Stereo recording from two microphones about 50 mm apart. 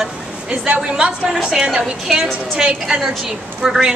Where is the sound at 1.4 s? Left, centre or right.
Centre.